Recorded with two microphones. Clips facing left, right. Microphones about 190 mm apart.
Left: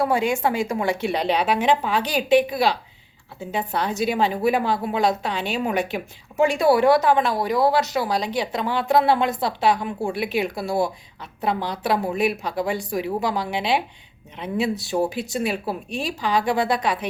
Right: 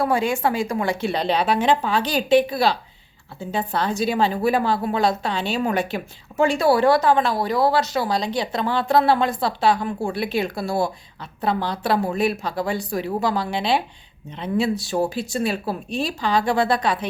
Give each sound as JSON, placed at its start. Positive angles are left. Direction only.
{"t": 0.0, "sound": "a woman's voice", "side_deg": 20}